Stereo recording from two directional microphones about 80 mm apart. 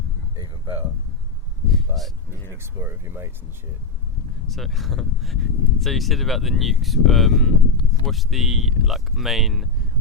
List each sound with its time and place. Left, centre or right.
1.9 s speech: right
4.4 s speech: centre